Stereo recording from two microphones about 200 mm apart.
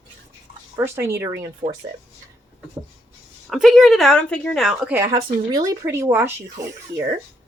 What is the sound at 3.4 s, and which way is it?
Speech, centre (ahead or behind).